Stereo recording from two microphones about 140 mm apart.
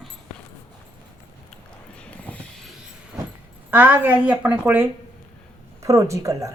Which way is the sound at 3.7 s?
15° right (ahead or behind).